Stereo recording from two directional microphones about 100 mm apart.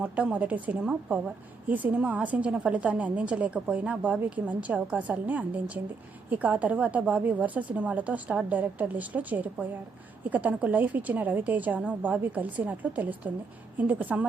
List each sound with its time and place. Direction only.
0.0 s speech: 15° right (ahead or behind)